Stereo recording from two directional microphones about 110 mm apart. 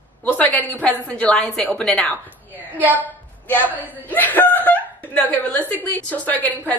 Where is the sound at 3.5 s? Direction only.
15° left (ahead or behind).